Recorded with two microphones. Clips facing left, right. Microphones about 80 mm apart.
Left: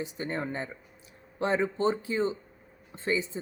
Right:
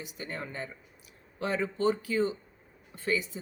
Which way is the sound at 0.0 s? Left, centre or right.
Left.